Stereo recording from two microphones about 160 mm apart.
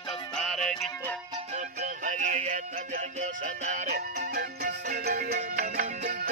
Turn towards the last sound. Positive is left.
turn(degrees=-55)  # may be behind; listen again after turning